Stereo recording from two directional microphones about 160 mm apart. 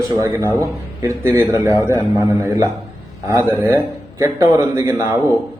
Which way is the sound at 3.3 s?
15° right (ahead or behind).